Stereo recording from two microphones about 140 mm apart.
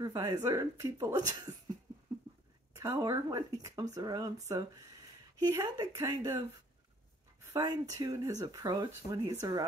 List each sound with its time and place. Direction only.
0.0 s speech: 25° right (ahead or behind)
2.7 s speech: 25° right (ahead or behind)
7.5 s speech: 25° right (ahead or behind)